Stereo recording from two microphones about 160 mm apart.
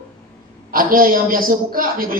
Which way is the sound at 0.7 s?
65° right (ahead or behind).